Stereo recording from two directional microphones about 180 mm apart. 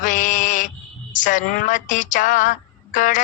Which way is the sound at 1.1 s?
45° left (ahead or behind).